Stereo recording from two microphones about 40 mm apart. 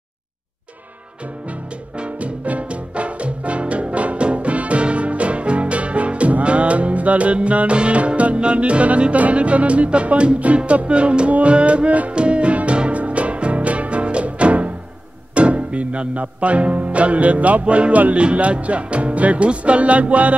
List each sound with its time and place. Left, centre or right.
2.0 s music: right